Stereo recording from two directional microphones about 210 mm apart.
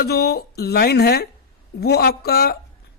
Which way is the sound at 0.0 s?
50° left (ahead or behind).